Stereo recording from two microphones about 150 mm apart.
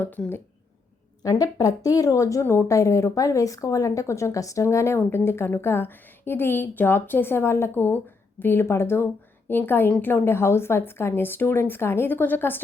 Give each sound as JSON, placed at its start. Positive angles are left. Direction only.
{"t": 0.0, "sound": "speech", "side_deg": 10}
{"t": 1.2, "sound": "speech", "side_deg": 25}